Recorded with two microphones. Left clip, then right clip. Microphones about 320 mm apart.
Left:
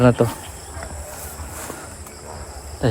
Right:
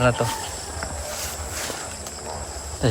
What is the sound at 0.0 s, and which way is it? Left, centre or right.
Insect, centre.